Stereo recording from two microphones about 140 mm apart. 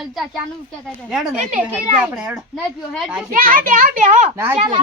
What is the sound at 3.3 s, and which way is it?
A child's voice, 80° right.